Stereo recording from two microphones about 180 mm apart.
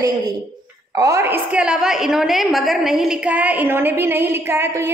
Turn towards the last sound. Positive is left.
turn(degrees=-15)  # may be behind; listen again after turning